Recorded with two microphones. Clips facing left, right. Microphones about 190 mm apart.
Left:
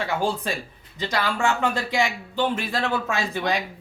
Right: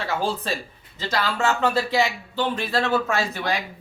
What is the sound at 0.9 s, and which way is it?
Speech, 15° left (ahead or behind).